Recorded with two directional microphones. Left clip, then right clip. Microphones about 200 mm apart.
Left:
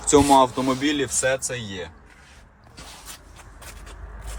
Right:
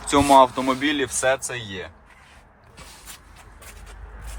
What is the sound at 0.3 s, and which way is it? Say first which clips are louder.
Speech: right 3 dB; 15° left (ahead or behind).